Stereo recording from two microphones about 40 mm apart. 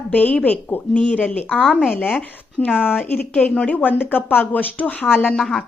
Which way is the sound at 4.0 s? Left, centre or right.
Left.